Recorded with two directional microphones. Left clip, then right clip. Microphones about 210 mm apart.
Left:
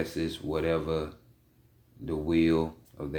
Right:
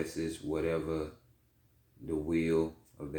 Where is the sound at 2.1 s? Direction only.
40° left (ahead or behind).